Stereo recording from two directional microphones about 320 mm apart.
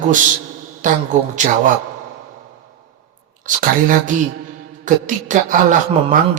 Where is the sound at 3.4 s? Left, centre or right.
Right.